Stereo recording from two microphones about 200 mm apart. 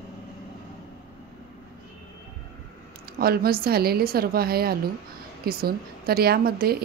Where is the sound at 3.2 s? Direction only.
50° right (ahead or behind).